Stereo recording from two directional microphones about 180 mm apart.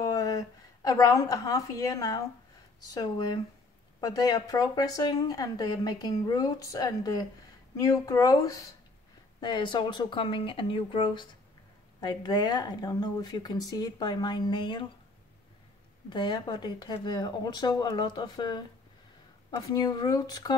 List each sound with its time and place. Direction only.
0.0 s a woman's voice: 20° left (ahead or behind)
16.1 s speech: 25° left (ahead or behind)